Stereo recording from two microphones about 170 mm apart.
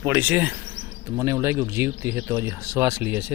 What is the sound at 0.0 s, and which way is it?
Speech, 10° right (ahead or behind).